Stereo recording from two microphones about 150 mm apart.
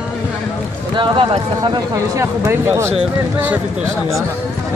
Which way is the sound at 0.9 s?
35° right (ahead or behind).